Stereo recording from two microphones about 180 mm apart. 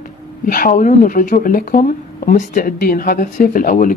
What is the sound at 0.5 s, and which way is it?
A woman's voice, 50° left (ahead or behind).